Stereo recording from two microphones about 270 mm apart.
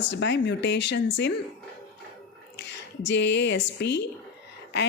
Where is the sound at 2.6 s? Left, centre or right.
Left.